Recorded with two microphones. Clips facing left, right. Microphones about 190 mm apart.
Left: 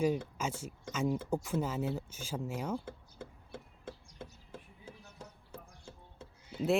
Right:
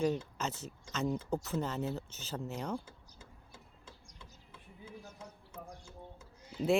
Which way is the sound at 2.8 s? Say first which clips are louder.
Left 10 dB; 60° left (ahead or behind).